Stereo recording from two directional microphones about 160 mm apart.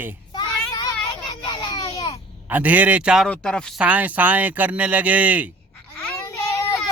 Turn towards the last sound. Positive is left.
turn(degrees=15)  # may be behind; listen again after turning